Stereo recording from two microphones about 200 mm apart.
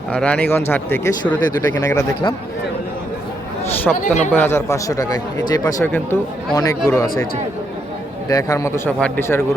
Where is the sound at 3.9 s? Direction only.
5° left (ahead or behind).